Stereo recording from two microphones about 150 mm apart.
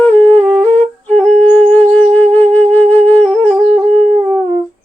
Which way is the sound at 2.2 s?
10° left (ahead or behind).